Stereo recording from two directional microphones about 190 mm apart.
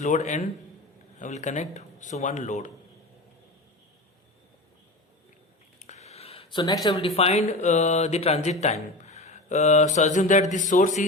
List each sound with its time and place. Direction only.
0.0 s speech: 40° left (ahead or behind)
5.8 s a sound: 35° left (ahead or behind)
6.8 s speech: 30° left (ahead or behind)